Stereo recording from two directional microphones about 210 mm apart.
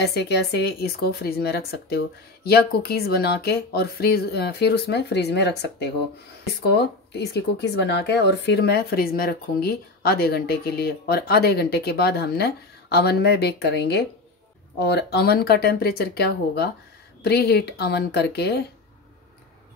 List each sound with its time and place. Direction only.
0.0 s speech: 50° left (ahead or behind)